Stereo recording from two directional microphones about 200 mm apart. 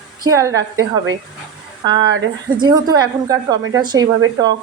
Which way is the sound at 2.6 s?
20° right (ahead or behind).